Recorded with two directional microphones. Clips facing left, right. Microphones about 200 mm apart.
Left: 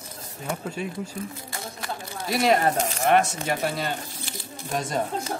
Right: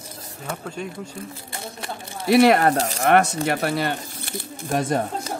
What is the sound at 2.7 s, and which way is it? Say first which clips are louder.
Speech: right 3 dB; 35° right (ahead or behind).